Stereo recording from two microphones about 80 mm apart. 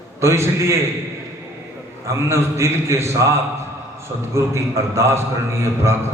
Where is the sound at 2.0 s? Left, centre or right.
Right.